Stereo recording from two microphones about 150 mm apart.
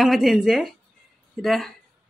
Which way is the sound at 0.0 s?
Centre (ahead or behind).